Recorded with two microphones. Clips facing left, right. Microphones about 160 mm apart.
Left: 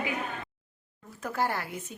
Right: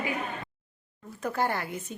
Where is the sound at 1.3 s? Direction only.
5° left (ahead or behind).